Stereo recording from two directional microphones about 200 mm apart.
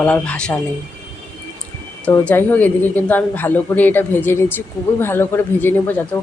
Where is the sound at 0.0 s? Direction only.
5° left (ahead or behind).